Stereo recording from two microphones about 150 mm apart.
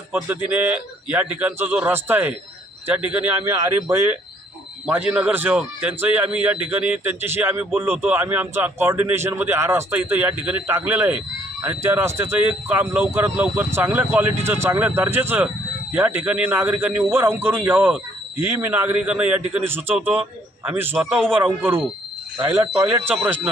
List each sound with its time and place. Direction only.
0.1 s a man's voice: 10° right (ahead or behind)
23.1 s a man's voice: 10° right (ahead or behind)